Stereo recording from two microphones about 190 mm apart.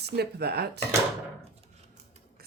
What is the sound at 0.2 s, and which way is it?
Speech, 60° right (ahead or behind).